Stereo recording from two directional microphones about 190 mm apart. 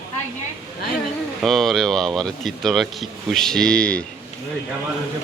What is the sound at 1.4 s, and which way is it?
Speech, centre (ahead or behind).